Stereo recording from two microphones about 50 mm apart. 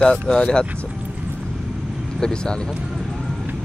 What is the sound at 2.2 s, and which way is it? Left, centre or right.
Speech, centre.